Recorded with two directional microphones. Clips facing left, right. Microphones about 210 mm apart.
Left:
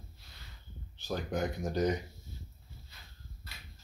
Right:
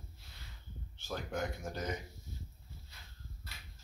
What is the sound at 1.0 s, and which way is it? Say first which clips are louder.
Speech: left 5 dB; 15° left (ahead or behind).